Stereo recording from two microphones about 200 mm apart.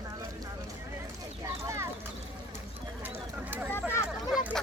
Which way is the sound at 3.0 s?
10° right (ahead or behind).